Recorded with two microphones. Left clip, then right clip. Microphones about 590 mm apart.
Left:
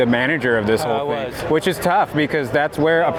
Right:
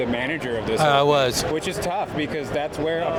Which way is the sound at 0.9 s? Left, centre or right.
Right.